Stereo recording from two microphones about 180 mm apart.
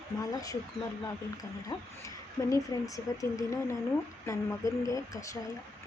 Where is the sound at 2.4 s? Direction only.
20° left (ahead or behind).